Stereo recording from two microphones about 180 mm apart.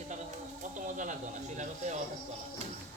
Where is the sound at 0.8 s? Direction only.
45° right (ahead or behind).